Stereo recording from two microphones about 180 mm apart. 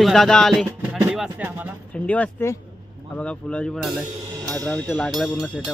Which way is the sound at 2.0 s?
10° left (ahead or behind).